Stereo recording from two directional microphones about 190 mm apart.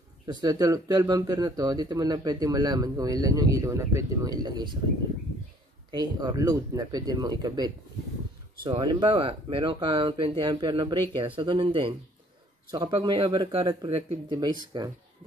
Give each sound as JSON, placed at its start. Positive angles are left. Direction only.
{"t": 0.3, "sound": "speech", "side_deg": -20}
{"t": 5.9, "sound": "speech", "side_deg": -20}
{"t": 14.3, "sound": "speech", "side_deg": -20}